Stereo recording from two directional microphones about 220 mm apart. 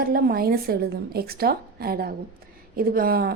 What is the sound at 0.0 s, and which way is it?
A woman's voice, 45° right (ahead or behind).